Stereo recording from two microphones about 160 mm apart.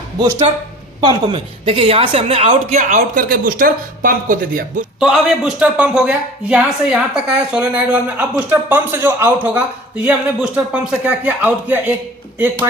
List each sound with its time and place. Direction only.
1.0 s a woman's voice: 35° right (ahead or behind)
3.2 s speech: 65° right (ahead or behind)
4.9 s speech: 5° right (ahead or behind)